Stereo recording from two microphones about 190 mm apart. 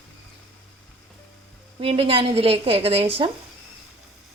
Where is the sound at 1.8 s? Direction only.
30° right (ahead or behind).